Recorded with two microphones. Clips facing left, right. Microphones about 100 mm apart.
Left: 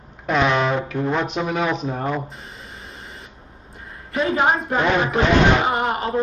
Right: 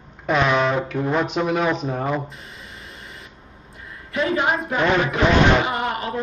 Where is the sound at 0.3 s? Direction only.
Centre (ahead or behind).